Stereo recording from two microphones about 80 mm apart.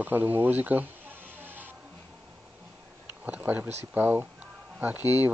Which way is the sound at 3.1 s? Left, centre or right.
Right.